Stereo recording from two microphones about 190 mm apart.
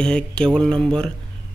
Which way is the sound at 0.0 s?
5° left (ahead or behind).